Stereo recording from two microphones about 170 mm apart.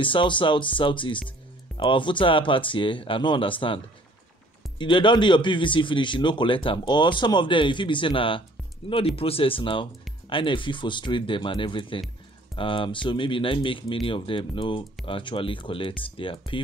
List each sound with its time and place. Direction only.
0.0 s speech: 30° left (ahead or behind)